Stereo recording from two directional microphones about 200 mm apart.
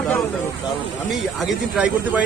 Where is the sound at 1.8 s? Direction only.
5° right (ahead or behind).